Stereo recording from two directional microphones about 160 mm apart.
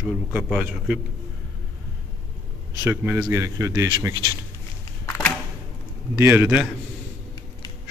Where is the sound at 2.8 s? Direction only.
15° right (ahead or behind).